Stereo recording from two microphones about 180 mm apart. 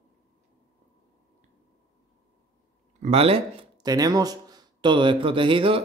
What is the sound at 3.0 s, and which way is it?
Speech, 35° right (ahead or behind).